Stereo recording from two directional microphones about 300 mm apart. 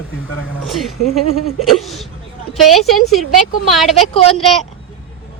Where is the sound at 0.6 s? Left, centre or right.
Centre.